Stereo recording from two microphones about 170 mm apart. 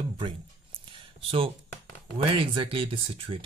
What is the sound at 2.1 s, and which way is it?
Speech, 30° right (ahead or behind).